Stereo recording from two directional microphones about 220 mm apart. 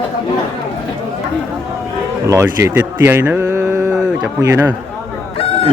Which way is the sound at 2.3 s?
10° right (ahead or behind).